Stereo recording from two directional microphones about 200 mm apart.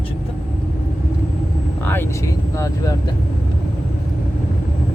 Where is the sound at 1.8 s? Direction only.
10° left (ahead or behind).